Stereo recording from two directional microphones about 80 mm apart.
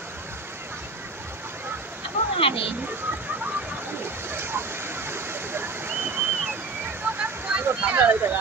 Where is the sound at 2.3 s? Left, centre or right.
Left.